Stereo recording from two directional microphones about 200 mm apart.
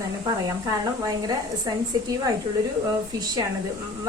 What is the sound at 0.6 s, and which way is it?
Speech, 20° right (ahead or behind).